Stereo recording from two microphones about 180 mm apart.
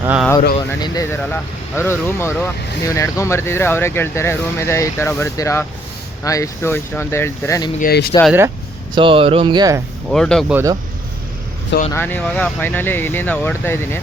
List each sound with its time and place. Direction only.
0.0 s speech: 10° right (ahead or behind)
0.7 s speech: 15° left (ahead or behind)
7.8 s speech: 60° left (ahead or behind)
9.0 s speech: 30° right (ahead or behind)
10.1 s speech: 5° left (ahead or behind)
10.5 s speech: 15° right (ahead or behind)
11.9 s speech: 10° left (ahead or behind)